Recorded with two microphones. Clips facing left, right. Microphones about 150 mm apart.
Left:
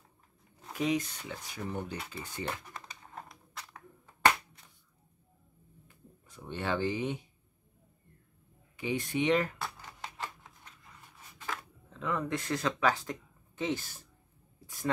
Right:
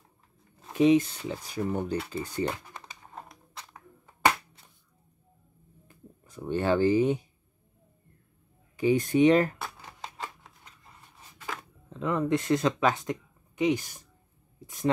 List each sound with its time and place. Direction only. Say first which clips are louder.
0.7 s speech: right 10 dB; 25° right (ahead or behind)
6.2 s speech: right 9 dB; 45° right (ahead or behind)
8.7 s speech: right 9 dB; 40° right (ahead or behind)
10.0 s a sound: right 2 dB; 20° right (ahead or behind)
11.4 s speech: right 1 dB; 25° right (ahead or behind)